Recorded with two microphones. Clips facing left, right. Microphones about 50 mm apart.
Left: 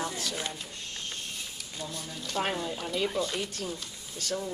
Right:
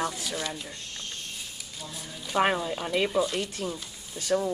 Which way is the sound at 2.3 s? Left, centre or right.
Centre.